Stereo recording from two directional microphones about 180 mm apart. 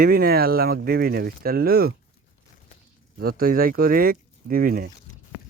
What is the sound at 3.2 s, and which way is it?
Speech, 55° right (ahead or behind).